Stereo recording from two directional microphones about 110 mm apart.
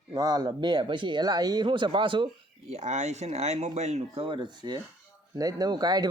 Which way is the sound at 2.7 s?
90° right.